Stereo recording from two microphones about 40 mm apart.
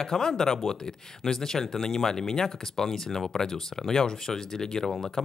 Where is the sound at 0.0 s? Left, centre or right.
Centre.